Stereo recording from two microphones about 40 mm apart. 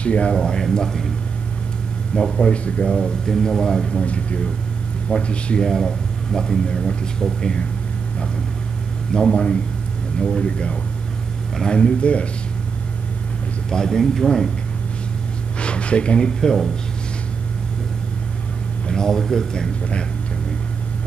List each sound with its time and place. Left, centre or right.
0.0 s speech: left
0.4 s speech: centre
2.1 s speech: centre
2.5 s speech: left
2.9 s speech: centre
4.0 s speech: left
5.6 s a man's voice: centre
9.3 s speech: left
11.6 s speech: centre
12.0 s speech: left
13.7 s speech: centre
15.6 s speech: left
18.9 s speech: centre